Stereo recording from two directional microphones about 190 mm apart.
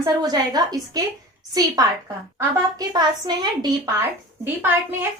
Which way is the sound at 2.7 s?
20° right (ahead or behind).